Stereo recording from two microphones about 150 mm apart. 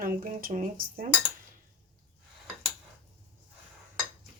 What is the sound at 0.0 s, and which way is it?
Speech, 70° right (ahead or behind).